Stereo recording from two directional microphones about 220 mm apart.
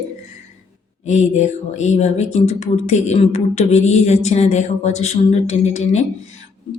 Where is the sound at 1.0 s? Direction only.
30° left (ahead or behind).